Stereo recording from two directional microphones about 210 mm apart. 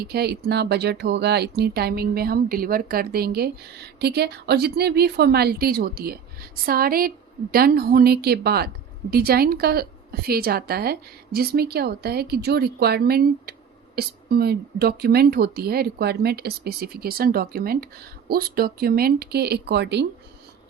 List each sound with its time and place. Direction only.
0.0 s a woman's voice: 50° right (ahead or behind)